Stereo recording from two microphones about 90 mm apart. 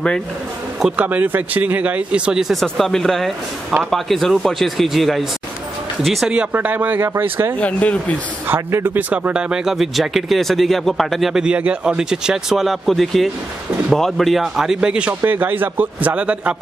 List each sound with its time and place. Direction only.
0.7 s speech: 10° right (ahead or behind)
1.0 s a man's voice: 20° right (ahead or behind); by 6.3 s centre (ahead or behind)
6.3 s a man's voice: 15° right (ahead or behind)
7.5 s speech: 15° left (ahead or behind)
8.5 s a man's voice: 25° right (ahead or behind)
9.1 s a man's voice: 15° right (ahead or behind)